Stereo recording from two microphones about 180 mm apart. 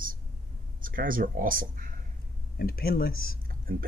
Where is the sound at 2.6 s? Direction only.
55° left (ahead or behind).